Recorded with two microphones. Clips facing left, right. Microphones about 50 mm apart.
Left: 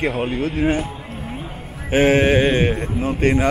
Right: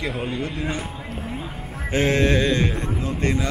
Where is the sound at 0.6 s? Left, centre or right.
Left.